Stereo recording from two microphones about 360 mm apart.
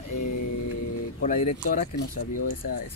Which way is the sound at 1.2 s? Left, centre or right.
Centre.